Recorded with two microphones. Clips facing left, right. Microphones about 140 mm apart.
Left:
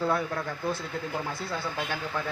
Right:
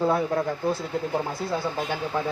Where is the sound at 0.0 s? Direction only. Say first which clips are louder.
Right 5 dB; 25° right (ahead or behind).